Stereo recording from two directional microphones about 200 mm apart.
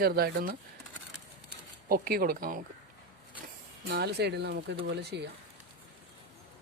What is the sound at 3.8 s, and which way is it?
Speech, 55° right (ahead or behind).